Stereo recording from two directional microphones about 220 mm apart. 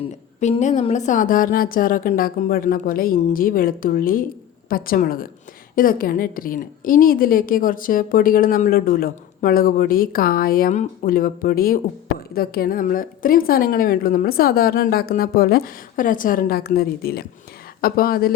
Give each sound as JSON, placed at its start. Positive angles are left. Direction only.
{"t": 0.3, "sound": "a woman's voice", "side_deg": 30}